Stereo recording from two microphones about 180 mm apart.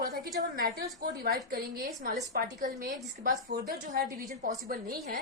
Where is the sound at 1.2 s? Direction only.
60° right (ahead or behind).